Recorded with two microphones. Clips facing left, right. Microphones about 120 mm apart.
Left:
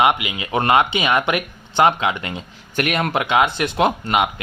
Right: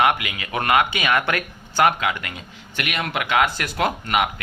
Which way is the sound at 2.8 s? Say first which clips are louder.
Left 6 dB; 40° left (ahead or behind).